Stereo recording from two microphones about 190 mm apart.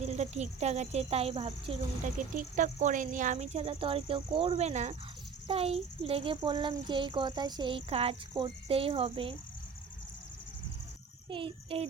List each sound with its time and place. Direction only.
0.0 s speech: 35° right (ahead or behind)
2.0 s a child's voice: 40° right (ahead or behind)
11.3 s a child's voice: 25° right (ahead or behind)